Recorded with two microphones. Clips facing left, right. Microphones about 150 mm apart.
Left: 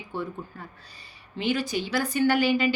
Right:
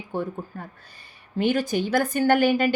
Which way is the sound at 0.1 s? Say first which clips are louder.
Right 4 dB; 45° right (ahead or behind).